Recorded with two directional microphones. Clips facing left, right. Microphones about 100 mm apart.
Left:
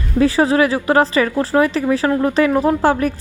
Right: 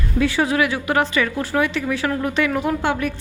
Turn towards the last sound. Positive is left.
turn(degrees=35)  # may be behind; listen again after turning